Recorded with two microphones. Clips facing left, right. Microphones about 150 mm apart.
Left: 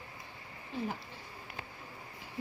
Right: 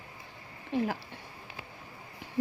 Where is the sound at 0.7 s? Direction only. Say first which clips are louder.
Right 7 dB; 75° right (ahead or behind).